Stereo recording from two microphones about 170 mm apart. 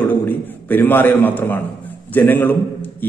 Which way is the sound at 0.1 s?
10° left (ahead or behind).